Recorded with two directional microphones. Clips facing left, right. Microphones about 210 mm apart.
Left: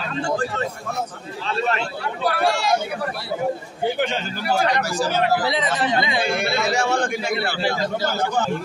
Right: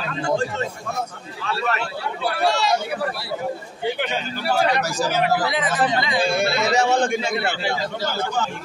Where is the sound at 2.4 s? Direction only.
55° left (ahead or behind).